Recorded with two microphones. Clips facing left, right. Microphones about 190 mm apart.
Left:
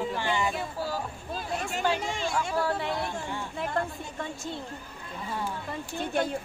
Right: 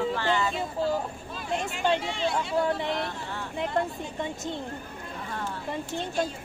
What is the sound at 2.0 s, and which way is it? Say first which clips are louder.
Speech: right 2 dB; 45° left (ahead or behind).